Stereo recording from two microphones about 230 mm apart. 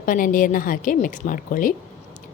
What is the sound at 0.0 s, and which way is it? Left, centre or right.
A woman's voice, left.